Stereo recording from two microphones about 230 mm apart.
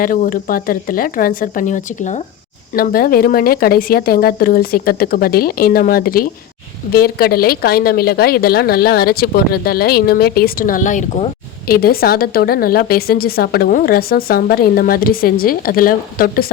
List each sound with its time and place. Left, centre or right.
0.0 s a woman's voice: left